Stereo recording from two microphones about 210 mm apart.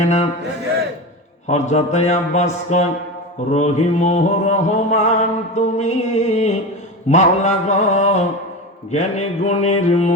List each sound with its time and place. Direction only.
0.0 s mantra: 35° left (ahead or behind)
1.5 s mantra: 35° left (ahead or behind)